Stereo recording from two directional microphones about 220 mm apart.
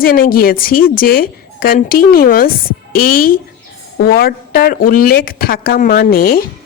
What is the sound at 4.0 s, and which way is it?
Speech, 45° left (ahead or behind).